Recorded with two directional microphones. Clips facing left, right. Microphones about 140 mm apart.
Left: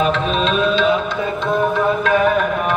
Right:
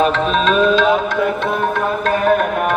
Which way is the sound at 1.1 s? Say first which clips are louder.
Right 2 dB; 70° right (ahead or behind).